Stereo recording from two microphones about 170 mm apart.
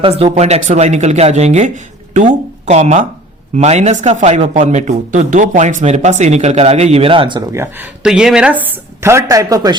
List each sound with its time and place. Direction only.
0.0 s speech: 35° right (ahead or behind)
7.5 s a woman's voice: 15° right (ahead or behind)
8.0 s a woman's voice: 5° right (ahead or behind); by 9.7 s 20° right (ahead or behind)